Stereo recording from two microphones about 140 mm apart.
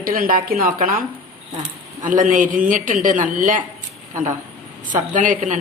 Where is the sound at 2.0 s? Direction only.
70° right (ahead or behind).